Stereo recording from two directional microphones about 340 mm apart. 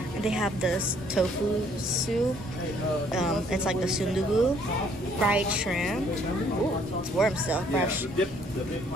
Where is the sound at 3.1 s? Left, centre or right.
Centre.